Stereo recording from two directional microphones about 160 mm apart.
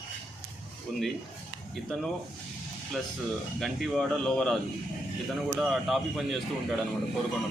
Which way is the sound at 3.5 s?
Centre (ahead or behind).